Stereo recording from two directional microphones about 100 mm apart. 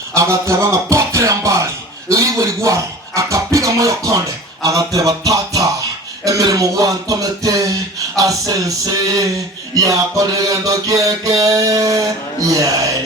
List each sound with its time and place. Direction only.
0.1 s music: 30° right (ahead or behind)
2.0 s speech: 30° right (ahead or behind)
4.6 s music: 35° right (ahead or behind)